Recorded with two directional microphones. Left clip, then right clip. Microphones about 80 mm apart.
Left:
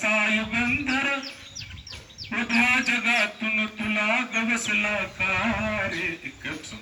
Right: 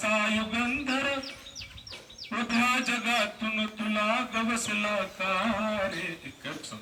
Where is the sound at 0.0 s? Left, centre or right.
Centre.